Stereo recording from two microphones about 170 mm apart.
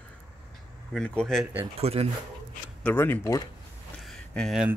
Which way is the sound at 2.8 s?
10° left (ahead or behind).